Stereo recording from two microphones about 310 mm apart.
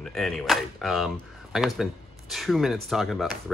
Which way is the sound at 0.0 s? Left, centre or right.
Centre.